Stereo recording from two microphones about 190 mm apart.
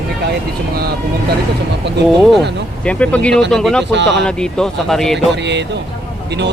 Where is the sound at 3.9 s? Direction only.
65° right (ahead or behind).